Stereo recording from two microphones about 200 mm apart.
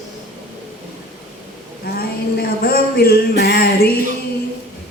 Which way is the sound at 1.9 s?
50° left (ahead or behind).